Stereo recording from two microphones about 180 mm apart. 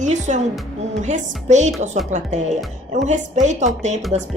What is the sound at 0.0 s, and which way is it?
A woman's voice, 40° right (ahead or behind).